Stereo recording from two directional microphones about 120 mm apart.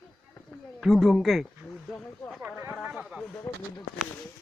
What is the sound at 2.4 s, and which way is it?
Speech, 15° right (ahead or behind).